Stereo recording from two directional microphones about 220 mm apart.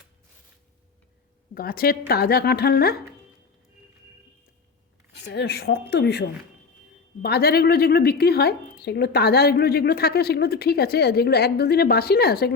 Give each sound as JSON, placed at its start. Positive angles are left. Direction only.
{"t": 1.5, "sound": "a woman's voice", "side_deg": 40}
{"t": 5.3, "sound": "a woman's voice", "side_deg": 50}